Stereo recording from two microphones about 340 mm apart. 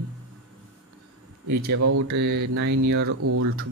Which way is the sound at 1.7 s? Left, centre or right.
Right.